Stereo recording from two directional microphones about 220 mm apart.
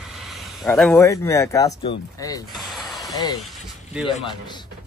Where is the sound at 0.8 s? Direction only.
10° left (ahead or behind).